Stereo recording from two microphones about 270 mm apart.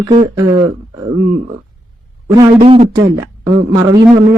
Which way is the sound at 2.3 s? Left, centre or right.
Centre.